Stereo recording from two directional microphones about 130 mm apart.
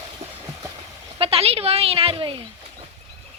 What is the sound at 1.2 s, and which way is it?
A woman's voice, 50° right (ahead or behind).